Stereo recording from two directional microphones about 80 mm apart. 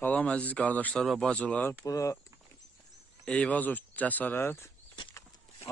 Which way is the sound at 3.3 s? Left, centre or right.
Centre.